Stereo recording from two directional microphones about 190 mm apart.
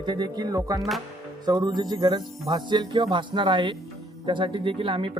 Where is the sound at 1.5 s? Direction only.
20° right (ahead or behind).